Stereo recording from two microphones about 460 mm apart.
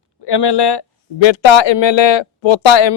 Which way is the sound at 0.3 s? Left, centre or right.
Left.